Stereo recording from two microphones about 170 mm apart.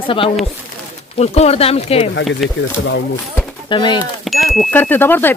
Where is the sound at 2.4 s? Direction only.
Centre (ahead or behind).